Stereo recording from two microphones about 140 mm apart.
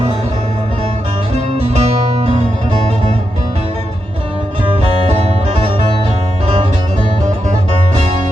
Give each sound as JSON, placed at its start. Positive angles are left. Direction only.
{"t": 1.3, "sound": "music", "side_deg": -45}